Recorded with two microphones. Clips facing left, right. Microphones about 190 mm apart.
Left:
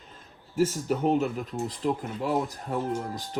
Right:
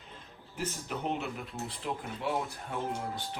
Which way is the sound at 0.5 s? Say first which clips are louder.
Left 11 dB; 45° left (ahead or behind).